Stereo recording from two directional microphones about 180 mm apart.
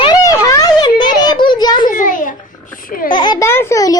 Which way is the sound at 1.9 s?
45° left (ahead or behind).